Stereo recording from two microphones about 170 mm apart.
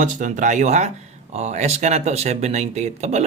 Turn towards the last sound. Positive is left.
turn(degrees=-40)  # may be behind; listen again after turning